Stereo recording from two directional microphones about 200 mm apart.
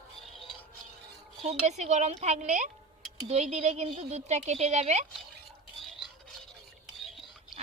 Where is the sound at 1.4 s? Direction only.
35° right (ahead or behind).